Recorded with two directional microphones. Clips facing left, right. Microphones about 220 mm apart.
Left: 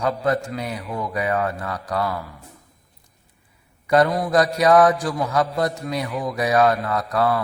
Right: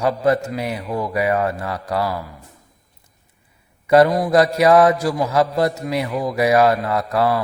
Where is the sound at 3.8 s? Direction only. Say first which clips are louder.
Right 4 dB; 25° right (ahead or behind).